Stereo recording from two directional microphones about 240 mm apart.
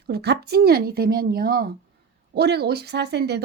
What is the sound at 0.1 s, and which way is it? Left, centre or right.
A woman's voice, right.